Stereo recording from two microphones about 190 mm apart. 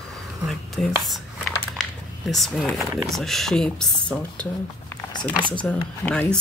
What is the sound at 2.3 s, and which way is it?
Speech, centre (ahead or behind).